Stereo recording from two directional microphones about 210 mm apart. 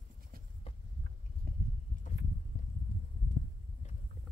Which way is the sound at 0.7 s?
30° left (ahead or behind).